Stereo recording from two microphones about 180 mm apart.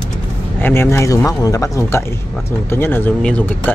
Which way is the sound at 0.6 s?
15° left (ahead or behind).